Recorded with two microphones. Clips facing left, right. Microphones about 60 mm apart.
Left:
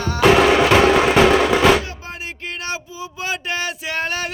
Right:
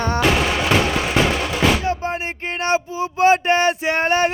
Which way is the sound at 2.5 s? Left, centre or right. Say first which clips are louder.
Right 11 dB; right.